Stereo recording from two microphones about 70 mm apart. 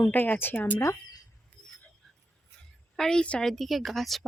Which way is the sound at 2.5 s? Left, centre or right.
Centre.